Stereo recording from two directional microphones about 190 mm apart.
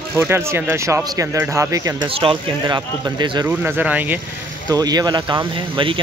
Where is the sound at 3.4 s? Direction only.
10° right (ahead or behind).